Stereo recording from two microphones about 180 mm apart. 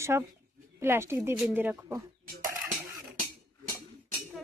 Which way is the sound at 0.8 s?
15° right (ahead or behind).